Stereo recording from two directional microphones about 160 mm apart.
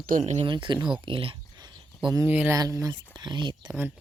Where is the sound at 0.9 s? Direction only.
35° right (ahead or behind).